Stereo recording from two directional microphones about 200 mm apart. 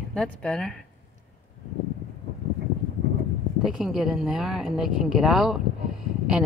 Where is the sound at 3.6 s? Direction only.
Centre (ahead or behind).